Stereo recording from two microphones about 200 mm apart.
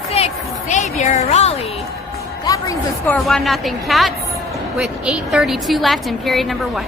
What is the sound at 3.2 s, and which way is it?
A woman's voice, centre (ahead or behind).